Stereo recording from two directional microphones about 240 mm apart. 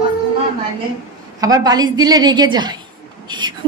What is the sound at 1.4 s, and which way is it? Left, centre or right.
A woman's voice, centre.